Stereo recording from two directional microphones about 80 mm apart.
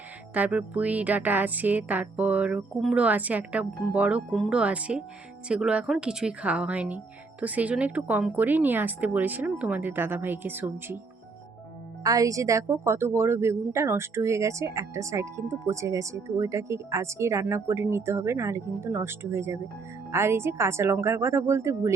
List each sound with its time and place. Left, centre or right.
0.3 s speech: centre
12.0 s a woman's voice: right